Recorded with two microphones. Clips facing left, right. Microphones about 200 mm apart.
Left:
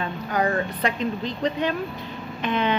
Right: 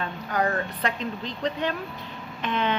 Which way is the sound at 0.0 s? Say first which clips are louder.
Left 2 dB; 10° left (ahead or behind).